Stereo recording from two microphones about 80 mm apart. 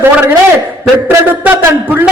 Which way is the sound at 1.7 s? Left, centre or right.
Right.